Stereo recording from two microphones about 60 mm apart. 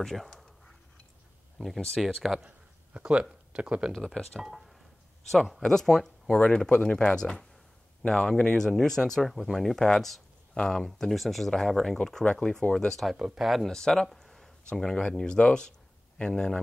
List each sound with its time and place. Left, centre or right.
0.0 s a sound: centre
2.0 s speech: centre
2.4 s a sound: right
3.5 s speech: centre
3.9 s speech: centre
4.4 s speech: centre
13.7 s speech: centre